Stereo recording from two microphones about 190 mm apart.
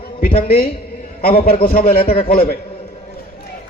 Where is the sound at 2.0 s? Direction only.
30° left (ahead or behind).